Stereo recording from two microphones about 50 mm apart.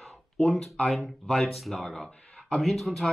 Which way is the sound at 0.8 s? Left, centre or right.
Centre.